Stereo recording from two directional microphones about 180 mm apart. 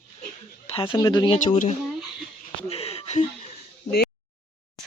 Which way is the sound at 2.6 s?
35° left (ahead or behind).